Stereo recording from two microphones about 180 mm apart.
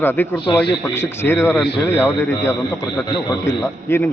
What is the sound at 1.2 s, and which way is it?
Speech, 15° left (ahead or behind).